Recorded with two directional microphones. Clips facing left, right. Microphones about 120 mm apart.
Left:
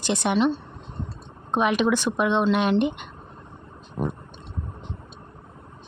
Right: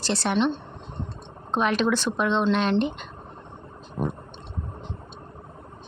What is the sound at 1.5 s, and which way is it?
Speech, 15° left (ahead or behind).